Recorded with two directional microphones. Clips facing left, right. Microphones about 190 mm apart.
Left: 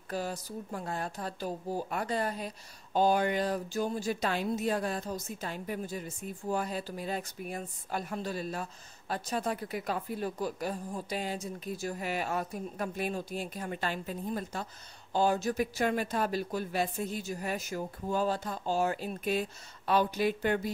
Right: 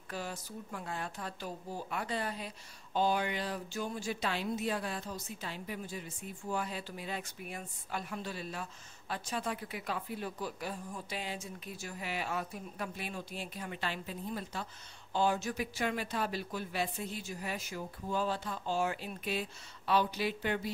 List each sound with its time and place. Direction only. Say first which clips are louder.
0.1 s a woman's voice: left 6 dB; 40° left (ahead or behind)